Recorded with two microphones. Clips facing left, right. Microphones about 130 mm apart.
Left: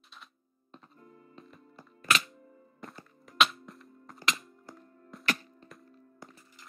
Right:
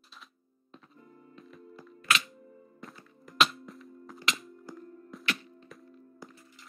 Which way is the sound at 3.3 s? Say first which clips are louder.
Even; centre (ahead or behind).